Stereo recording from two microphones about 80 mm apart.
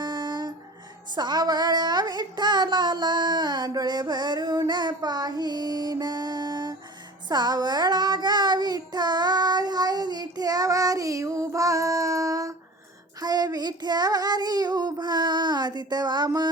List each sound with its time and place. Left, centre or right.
0.0 s music: right
1.1 s a sound: right
7.3 s child singing: right
13.2 s child singing: right